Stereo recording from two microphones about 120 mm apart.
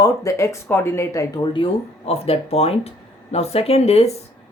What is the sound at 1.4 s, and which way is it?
Speech, 45° left (ahead or behind).